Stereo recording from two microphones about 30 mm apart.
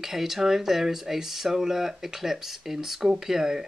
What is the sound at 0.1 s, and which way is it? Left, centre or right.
Speech, centre.